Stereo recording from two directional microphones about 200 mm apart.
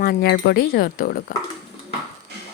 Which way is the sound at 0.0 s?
50° left (ahead or behind).